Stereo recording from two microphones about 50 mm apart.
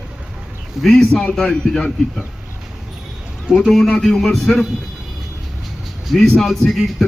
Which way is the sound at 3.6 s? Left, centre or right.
Centre.